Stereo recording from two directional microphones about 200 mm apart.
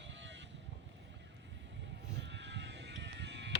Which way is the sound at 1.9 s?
60° right (ahead or behind).